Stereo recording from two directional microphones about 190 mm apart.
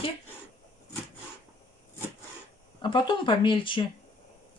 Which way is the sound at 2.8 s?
25° left (ahead or behind).